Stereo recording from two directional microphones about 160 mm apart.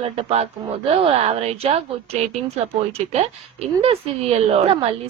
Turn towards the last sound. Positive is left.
turn(degrees=-40)  # may be behind; listen again after turning